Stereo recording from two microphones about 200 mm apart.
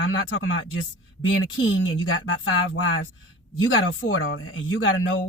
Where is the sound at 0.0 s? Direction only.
70° left (ahead or behind).